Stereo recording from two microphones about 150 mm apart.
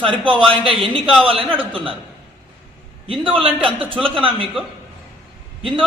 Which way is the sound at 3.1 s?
35° right (ahead or behind).